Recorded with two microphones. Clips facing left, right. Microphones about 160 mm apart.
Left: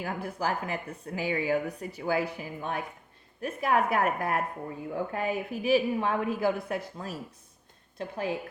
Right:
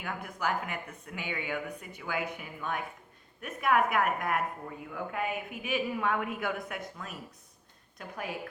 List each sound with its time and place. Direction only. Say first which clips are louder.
0.0 s a woman's voice: left 3 dB; 35° left (ahead or behind)